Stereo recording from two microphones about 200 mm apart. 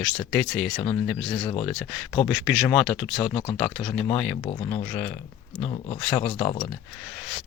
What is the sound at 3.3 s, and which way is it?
Speech, 25° left (ahead or behind).